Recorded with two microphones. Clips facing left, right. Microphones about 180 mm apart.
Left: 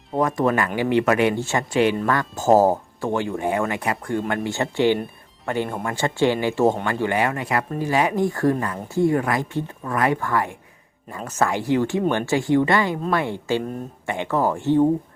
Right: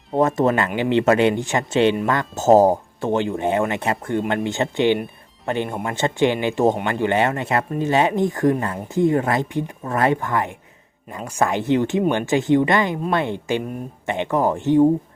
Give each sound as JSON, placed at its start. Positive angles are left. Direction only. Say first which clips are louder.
{"t": 0.2, "sound": "speech", "louder": "right 2 dB", "side_deg": -25}